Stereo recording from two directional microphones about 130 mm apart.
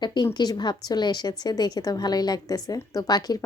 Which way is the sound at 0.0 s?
35° left (ahead or behind).